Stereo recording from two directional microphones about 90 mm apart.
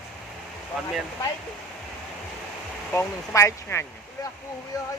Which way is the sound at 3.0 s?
30° left (ahead or behind).